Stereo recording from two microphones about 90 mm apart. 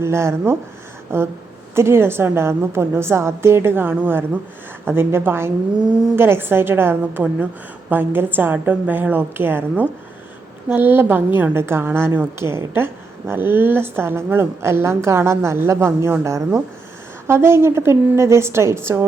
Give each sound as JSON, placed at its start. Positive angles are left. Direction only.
{"t": 0.0, "sound": "a woman's voice", "side_deg": -30}